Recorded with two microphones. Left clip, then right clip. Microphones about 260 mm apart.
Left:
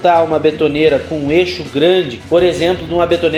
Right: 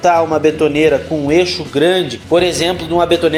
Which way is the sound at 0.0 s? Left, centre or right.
Right.